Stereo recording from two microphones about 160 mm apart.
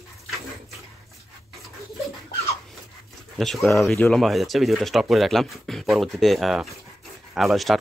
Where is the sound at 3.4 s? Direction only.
Centre (ahead or behind).